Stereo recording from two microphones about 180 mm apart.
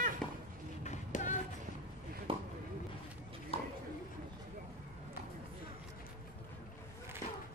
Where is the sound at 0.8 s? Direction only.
45° left (ahead or behind).